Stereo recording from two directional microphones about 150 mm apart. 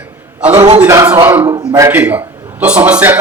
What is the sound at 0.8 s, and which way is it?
Speech, 20° right (ahead or behind).